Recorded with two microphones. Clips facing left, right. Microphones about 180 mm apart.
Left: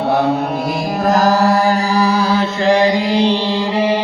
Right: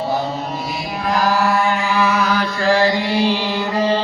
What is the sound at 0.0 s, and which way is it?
Mantra, 65° left (ahead or behind).